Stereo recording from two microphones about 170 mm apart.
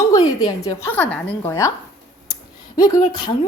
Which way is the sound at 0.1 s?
20° left (ahead or behind).